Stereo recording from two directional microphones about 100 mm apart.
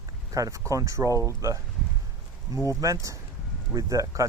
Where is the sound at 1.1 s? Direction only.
30° left (ahead or behind).